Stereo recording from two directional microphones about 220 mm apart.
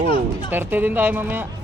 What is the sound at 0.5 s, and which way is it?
Speech, 10° right (ahead or behind).